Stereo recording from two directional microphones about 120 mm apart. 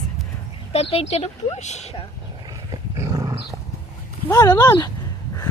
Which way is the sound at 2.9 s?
30° right (ahead or behind).